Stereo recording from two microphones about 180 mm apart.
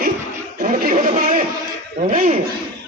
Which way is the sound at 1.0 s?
50° right (ahead or behind).